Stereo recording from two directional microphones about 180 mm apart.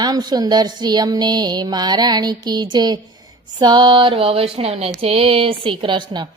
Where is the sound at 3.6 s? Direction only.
25° right (ahead or behind).